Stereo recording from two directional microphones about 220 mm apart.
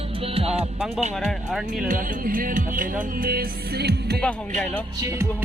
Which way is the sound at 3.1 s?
40° right (ahead or behind).